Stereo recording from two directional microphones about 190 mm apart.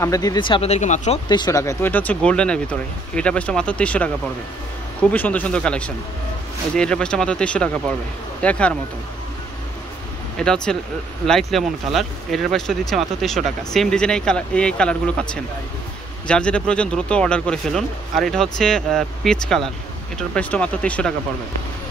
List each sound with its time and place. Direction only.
0.0 s speech: 20° left (ahead or behind); by 1.2 s 40° left (ahead or behind)
1.3 s speech: 20° left (ahead or behind)
5.1 s speech: 10° left (ahead or behind)
10.4 s speech: 5° left (ahead or behind)
16.3 s speech: 5° left (ahead or behind)